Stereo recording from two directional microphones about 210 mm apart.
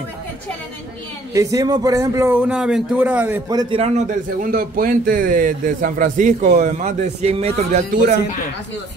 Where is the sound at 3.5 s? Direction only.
20° right (ahead or behind).